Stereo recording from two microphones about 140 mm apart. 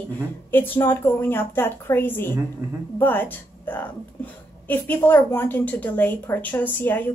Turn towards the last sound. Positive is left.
turn(degrees=15)  # may be behind; listen again after turning